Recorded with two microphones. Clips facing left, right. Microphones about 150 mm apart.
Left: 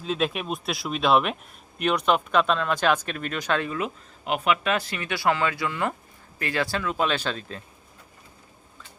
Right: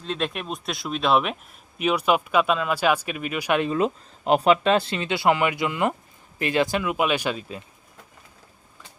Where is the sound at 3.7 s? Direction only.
35° right (ahead or behind); by 7.6 s 10° right (ahead or behind).